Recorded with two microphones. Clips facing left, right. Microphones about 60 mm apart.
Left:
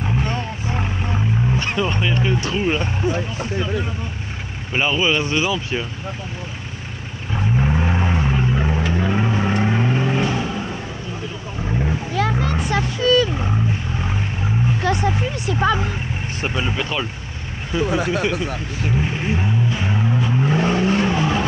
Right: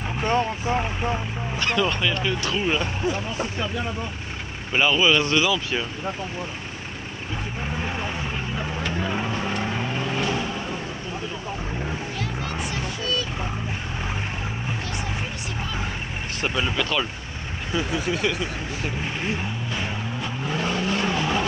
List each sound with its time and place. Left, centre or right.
0.7 s vehicle: centre
1.6 s speech: left
4.7 s speech: centre
7.6 s vehicle: centre
12.7 s vehicle: left
16.4 s speech: centre
17.9 s speech: left
18.9 s vehicle: centre; by 21.1 s left
21.1 s vehicle: centre